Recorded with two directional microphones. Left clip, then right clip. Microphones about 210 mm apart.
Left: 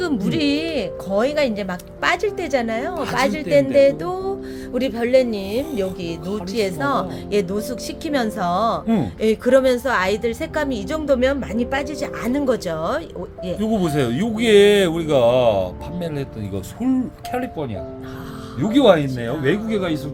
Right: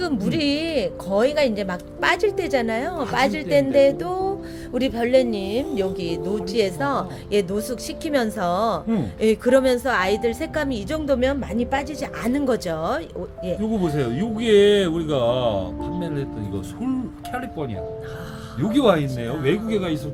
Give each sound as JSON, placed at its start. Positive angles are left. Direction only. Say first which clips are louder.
{"t": 0.0, "sound": "a woman's voice", "louder": "left 2 dB", "side_deg": -5}
{"t": 13.6, "sound": "speech", "louder": "left 5 dB", "side_deg": 45}
{"t": 18.6, "sound": "speech", "louder": "left 4 dB", "side_deg": 20}